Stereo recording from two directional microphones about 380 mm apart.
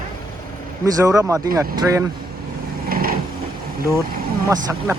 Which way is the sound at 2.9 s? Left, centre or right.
Right.